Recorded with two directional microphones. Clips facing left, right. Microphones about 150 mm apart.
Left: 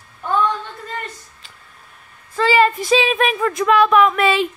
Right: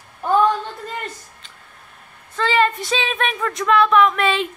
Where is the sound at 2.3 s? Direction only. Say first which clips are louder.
Left 3 dB; 10° left (ahead or behind).